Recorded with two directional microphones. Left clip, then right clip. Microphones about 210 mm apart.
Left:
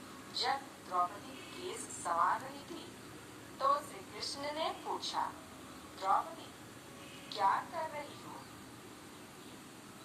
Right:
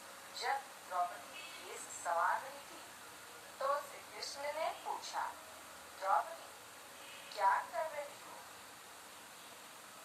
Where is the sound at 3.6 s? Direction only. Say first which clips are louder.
Left 5 dB; 25° left (ahead or behind).